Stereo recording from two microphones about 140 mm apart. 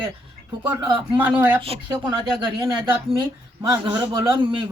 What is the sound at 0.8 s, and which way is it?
Speech, 30° right (ahead or behind).